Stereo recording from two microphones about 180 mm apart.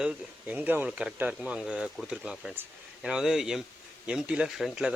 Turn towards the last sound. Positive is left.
turn(degrees=-5)  # may be behind; listen again after turning